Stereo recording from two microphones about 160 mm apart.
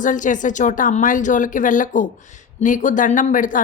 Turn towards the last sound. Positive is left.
turn(degrees=55)  # may be behind; listen again after turning